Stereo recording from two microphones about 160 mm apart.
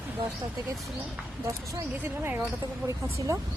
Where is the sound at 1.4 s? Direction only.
20° right (ahead or behind).